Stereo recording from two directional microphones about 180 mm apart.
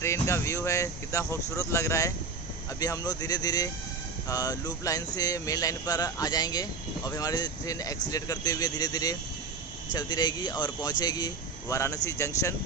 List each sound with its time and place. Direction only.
0.0 s speech: 15° left (ahead or behind)